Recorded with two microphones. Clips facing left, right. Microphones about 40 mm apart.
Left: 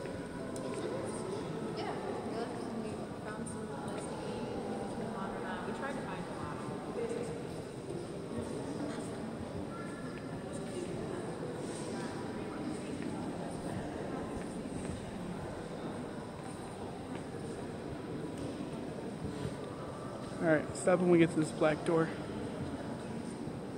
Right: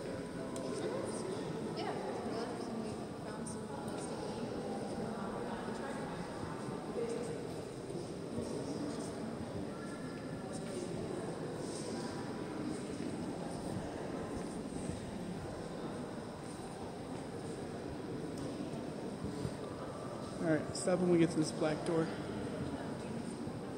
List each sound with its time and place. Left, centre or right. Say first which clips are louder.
20.4 s speech: left 5 dB; left